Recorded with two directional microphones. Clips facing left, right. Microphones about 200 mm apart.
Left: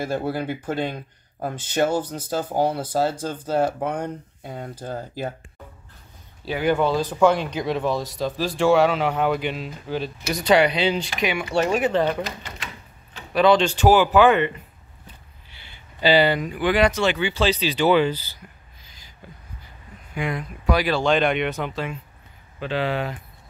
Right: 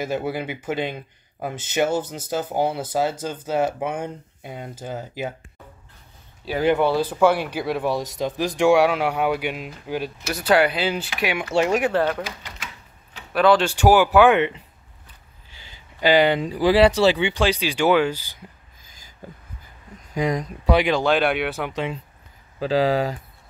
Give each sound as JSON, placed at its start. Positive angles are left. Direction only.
{"t": 0.2, "sound": "speech", "side_deg": -10}
{"t": 6.6, "sound": "speech", "side_deg": -20}
{"t": 16.0, "sound": "speech", "side_deg": -15}
{"t": 16.3, "sound": "speech", "side_deg": -30}
{"t": 17.3, "sound": "speech", "side_deg": -15}
{"t": 20.2, "sound": "speech", "side_deg": -40}
{"t": 20.7, "sound": "speech", "side_deg": -20}
{"t": 21.0, "sound": "speech", "side_deg": -5}
{"t": 21.7, "sound": "speech", "side_deg": -25}